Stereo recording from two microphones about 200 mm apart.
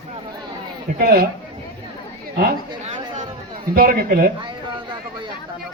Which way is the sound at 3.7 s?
50° right (ahead or behind).